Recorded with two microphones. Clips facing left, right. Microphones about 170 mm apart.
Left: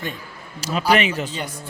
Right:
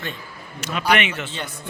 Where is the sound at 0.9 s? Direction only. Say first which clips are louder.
Left 2 dB; 35° left (ahead or behind).